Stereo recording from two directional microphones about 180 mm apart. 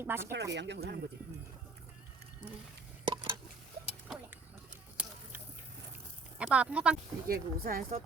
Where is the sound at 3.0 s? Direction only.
25° right (ahead or behind).